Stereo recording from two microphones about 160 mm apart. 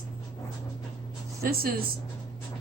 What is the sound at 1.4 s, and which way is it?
Speech, 70° right (ahead or behind).